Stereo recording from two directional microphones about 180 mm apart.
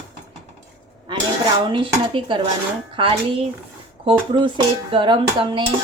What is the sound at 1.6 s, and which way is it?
A woman's voice, 25° right (ahead or behind).